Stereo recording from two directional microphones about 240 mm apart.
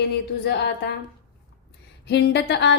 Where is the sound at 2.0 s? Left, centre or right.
Left.